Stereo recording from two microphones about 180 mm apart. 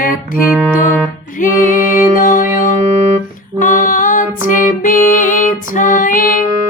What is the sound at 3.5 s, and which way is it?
Female singing, 45° left (ahead or behind).